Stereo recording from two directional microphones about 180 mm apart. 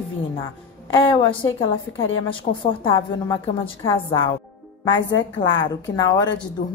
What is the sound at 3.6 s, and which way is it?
Speech, 30° left (ahead or behind).